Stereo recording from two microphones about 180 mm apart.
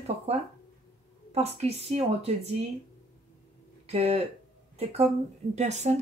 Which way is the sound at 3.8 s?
35° right (ahead or behind).